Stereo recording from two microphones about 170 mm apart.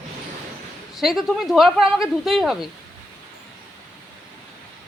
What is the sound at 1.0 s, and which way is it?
Speech, centre (ahead or behind).